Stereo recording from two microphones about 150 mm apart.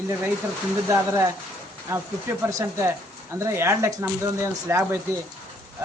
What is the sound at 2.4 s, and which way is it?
Speech, 20° right (ahead or behind).